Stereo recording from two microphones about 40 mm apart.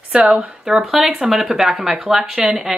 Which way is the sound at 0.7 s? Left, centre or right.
Centre.